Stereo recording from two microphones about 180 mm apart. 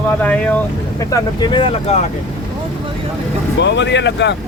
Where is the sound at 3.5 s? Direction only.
75° left (ahead or behind).